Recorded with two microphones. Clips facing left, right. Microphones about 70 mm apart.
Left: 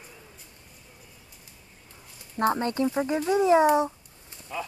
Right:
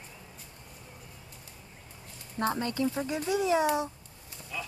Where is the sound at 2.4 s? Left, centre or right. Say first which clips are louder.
Left 5 dB; left.